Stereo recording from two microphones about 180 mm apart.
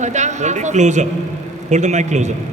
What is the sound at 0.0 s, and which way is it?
A woman's voice, 40° right (ahead or behind).